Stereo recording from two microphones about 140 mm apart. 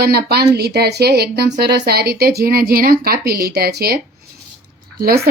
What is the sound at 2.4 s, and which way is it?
A woman's voice, 90° right.